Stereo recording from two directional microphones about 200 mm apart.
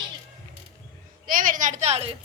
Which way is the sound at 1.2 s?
45° right (ahead or behind).